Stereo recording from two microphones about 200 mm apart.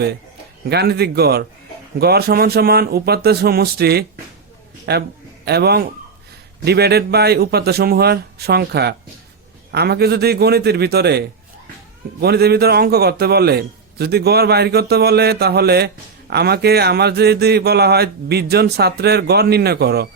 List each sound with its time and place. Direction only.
0.7 s a man's voice: 55° right (ahead or behind)